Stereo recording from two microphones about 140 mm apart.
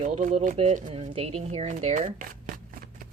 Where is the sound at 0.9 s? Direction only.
45° right (ahead or behind); by 2.5 s 70° right (ahead or behind).